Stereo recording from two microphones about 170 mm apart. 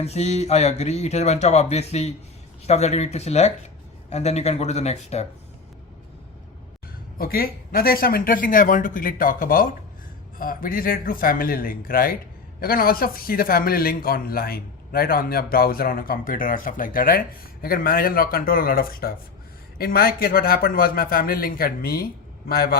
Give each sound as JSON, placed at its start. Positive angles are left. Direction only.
{"t": 0.0, "sound": "speech", "side_deg": 40}
{"t": 7.2, "sound": "a man's voice", "side_deg": 60}